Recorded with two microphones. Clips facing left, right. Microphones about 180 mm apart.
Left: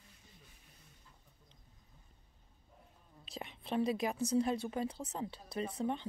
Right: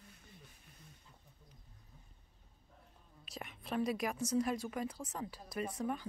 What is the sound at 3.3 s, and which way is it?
A woman's voice, 30° left (ahead or behind).